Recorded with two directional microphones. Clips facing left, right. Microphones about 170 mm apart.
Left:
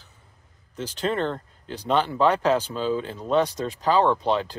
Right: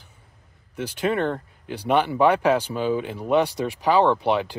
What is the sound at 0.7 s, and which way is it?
Speech, 10° right (ahead or behind).